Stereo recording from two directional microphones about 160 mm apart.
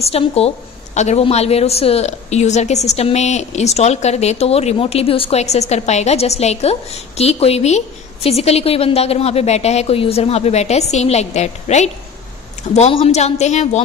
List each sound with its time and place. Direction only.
0.0 s a woman's voice: 40° left (ahead or behind)